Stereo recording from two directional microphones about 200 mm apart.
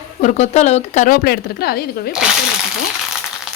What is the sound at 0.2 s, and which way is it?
A woman's voice, 35° left (ahead or behind).